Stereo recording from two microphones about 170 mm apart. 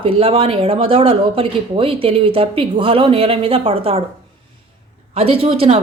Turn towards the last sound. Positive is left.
turn(degrees=-35)  # may be behind; listen again after turning